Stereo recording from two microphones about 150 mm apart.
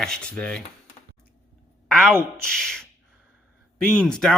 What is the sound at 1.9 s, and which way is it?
Speech, 5° left (ahead or behind).